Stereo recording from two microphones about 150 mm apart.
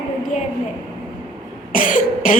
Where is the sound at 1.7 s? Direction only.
65° left (ahead or behind).